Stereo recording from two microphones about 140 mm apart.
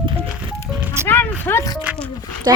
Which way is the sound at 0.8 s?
20° right (ahead or behind).